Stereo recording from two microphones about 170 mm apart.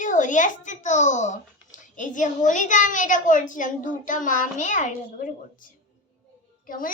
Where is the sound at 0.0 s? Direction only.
50° left (ahead or behind).